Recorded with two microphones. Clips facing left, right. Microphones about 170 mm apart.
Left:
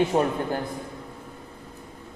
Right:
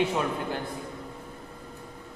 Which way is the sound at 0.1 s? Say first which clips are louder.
Left 5 dB; 40° left (ahead or behind).